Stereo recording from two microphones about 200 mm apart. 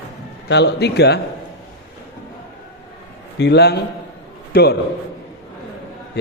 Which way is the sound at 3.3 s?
60° left (ahead or behind).